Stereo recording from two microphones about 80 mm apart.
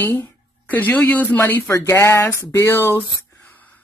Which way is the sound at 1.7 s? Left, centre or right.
Left.